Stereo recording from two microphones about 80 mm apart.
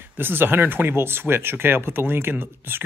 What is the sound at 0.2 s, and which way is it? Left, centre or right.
Speech, right.